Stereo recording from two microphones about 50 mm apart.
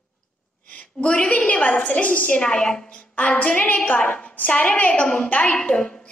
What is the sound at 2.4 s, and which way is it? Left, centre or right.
Speech, centre.